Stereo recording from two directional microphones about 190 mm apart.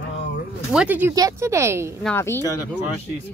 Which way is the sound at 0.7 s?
10° right (ahead or behind).